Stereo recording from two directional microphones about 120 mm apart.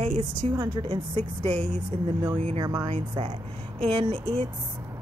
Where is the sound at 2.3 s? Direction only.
55° right (ahead or behind).